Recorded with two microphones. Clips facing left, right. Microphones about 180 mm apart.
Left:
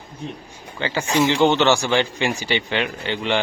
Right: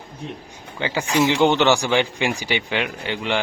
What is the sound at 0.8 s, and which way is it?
Speech, 15° right (ahead or behind).